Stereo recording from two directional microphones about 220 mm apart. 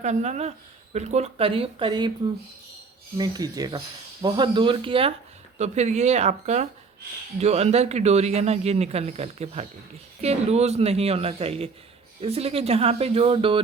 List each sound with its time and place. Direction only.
0.0 s a man's voice: 30° right (ahead or behind)
3.2 s a man's voice: 15° right (ahead or behind)